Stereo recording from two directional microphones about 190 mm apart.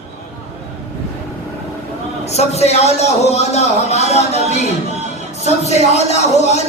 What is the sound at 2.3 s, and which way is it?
A man's voice, 35° left (ahead or behind).